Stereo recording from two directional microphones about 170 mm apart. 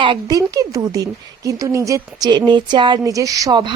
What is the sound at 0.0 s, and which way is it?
A woman's voice, 25° right (ahead or behind).